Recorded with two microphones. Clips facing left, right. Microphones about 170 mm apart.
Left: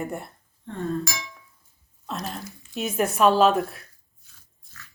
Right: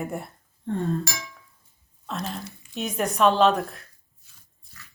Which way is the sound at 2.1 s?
Centre (ahead or behind).